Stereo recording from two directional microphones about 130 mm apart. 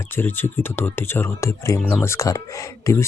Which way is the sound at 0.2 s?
15° left (ahead or behind).